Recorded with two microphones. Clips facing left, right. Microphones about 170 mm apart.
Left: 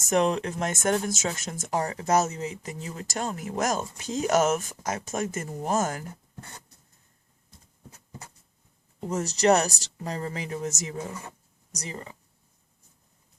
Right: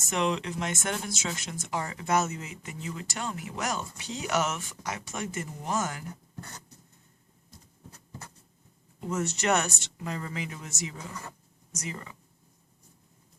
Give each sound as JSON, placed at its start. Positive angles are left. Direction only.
{"t": 0.0, "sound": "speech", "side_deg": 45}
{"t": 9.0, "sound": "speech", "side_deg": 35}